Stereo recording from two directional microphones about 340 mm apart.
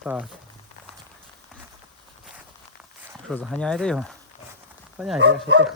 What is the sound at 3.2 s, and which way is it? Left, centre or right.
Speech, centre.